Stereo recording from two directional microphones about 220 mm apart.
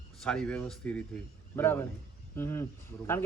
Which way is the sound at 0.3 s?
5° left (ahead or behind).